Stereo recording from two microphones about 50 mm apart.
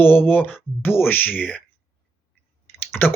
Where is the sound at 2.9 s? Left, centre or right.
Left.